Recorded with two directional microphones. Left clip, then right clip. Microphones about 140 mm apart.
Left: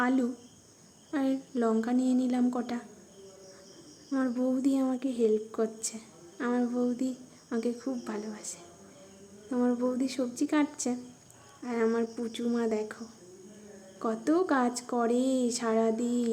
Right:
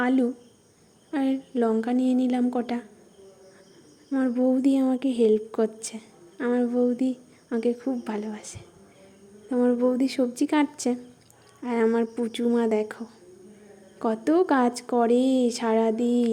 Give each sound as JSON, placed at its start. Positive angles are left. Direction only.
{"t": 0.0, "sound": "a woman's voice", "side_deg": -20}
{"t": 4.1, "sound": "a woman's voice", "side_deg": -20}